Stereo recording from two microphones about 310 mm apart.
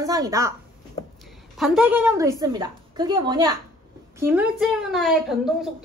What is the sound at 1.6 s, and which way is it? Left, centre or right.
A woman's voice, centre.